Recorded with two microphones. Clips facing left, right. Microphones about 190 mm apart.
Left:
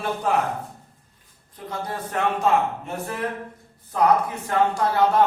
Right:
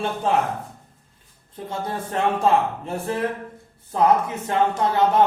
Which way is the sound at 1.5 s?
25° right (ahead or behind).